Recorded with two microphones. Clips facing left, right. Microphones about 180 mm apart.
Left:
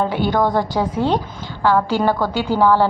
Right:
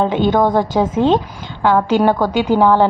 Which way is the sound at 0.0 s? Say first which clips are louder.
Right 4 dB; 20° right (ahead or behind).